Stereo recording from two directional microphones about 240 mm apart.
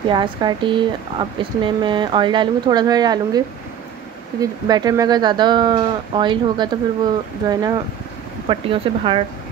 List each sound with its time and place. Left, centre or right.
0.1 s speech: centre